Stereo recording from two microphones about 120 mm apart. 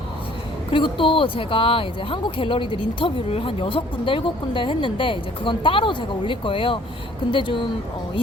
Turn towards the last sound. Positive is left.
turn(degrees=45)  # may be behind; listen again after turning